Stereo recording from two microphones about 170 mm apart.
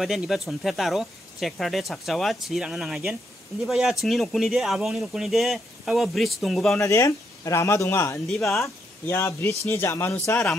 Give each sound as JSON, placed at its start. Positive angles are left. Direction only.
{"t": 0.0, "sound": "speech", "side_deg": 0}
{"t": 6.8, "sound": "speech", "side_deg": 15}
{"t": 8.3, "sound": "speech", "side_deg": 0}
{"t": 8.5, "sound": "speech", "side_deg": 15}